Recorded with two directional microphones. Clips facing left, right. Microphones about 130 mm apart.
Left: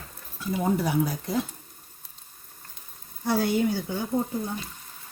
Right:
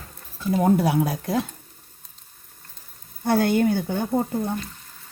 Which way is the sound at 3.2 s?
60° right (ahead or behind).